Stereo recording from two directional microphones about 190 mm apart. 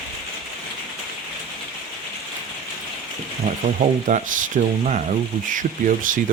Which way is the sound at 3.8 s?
40° right (ahead or behind).